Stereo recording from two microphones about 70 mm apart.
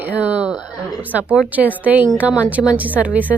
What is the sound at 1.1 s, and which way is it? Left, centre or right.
A woman's voice, centre.